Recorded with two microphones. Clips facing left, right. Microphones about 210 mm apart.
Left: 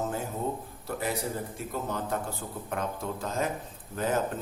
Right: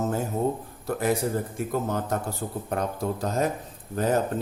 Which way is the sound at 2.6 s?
40° right (ahead or behind).